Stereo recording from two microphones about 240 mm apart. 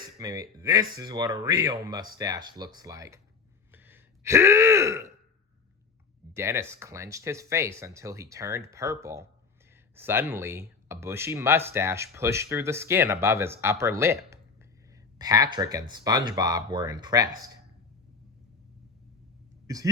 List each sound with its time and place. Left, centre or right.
0.2 s speech: centre
3.7 s throat clearing: centre
6.3 s speech: centre
19.6 s speech: centre